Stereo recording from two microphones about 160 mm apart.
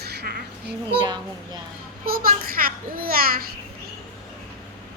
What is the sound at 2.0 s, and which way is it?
A child's voice, 65° right (ahead or behind).